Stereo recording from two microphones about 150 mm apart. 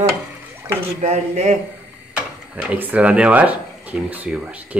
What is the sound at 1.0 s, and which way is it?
Speech, 50° right (ahead or behind).